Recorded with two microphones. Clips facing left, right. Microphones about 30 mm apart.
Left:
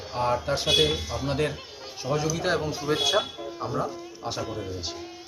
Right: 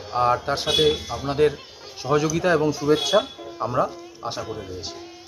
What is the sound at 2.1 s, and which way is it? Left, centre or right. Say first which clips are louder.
Speech: right 7 dB; right.